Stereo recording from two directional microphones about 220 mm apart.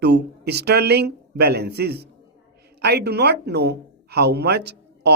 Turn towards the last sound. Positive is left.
turn(degrees=-50)  # may be behind; listen again after turning